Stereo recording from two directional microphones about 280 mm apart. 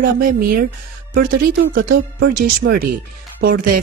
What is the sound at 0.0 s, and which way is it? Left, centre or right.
Speech, right.